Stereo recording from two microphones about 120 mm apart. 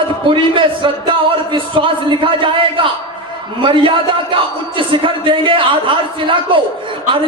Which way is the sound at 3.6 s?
45° right (ahead or behind).